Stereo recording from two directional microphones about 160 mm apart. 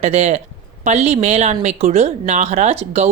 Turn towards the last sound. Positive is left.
turn(degrees=-45)  # may be behind; listen again after turning